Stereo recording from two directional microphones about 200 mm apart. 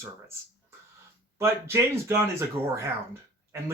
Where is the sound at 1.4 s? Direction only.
15° right (ahead or behind).